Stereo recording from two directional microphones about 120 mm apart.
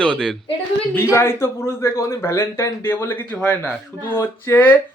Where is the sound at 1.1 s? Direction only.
20° left (ahead or behind).